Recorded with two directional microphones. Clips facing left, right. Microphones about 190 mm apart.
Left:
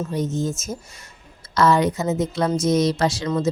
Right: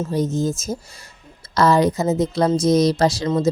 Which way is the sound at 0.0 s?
35° right (ahead or behind).